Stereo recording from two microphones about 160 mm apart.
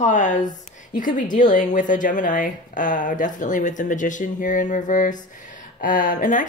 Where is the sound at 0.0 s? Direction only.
50° left (ahead or behind).